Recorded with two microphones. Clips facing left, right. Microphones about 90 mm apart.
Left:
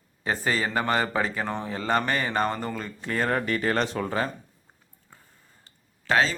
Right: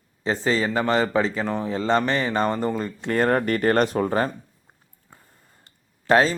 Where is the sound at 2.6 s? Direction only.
30° right (ahead or behind).